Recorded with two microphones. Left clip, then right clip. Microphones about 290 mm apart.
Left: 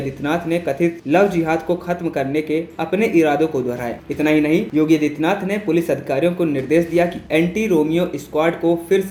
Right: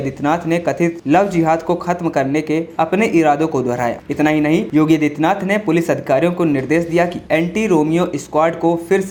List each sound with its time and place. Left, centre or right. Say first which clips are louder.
0.2 s speech: right 4 dB; right